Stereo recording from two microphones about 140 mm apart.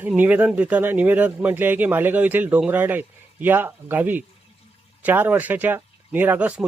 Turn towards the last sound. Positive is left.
turn(degrees=-10)  # may be behind; listen again after turning